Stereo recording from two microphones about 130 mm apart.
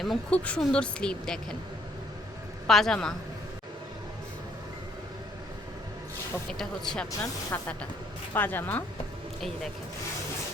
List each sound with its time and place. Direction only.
0.0 s a woman's voice: 5° left (ahead or behind)
2.6 s a woman's voice: 5° left (ahead or behind)
6.5 s a woman's voice: 5° left (ahead or behind)
7.5 s speech: 15° left (ahead or behind)